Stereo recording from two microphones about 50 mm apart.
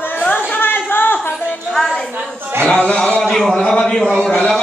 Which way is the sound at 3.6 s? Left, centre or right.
Centre.